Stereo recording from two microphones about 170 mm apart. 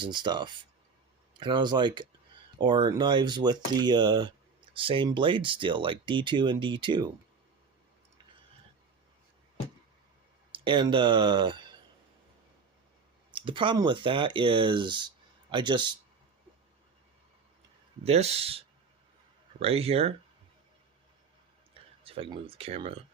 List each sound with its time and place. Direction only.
0.0 s speech: 25° right (ahead or behind)
10.5 s speech: 30° right (ahead or behind)
13.3 s speech: 30° right (ahead or behind)
18.0 s speech: 40° right (ahead or behind)
22.0 s speech: 35° right (ahead or behind)